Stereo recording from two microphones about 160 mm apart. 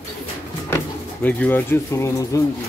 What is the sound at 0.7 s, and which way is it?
Speech, 15° left (ahead or behind).